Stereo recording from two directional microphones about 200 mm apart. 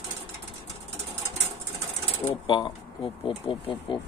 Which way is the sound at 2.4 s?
25° left (ahead or behind).